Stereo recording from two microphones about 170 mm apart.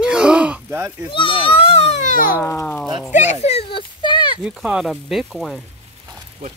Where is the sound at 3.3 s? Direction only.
40° left (ahead or behind).